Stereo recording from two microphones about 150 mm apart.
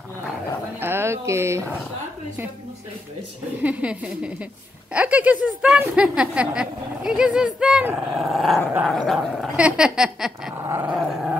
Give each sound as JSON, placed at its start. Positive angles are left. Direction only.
{"t": 0.7, "sound": "speech", "side_deg": -15}
{"t": 3.6, "sound": "speech", "side_deg": -10}